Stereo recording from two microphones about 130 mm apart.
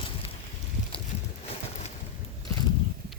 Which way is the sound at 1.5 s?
50° left (ahead or behind).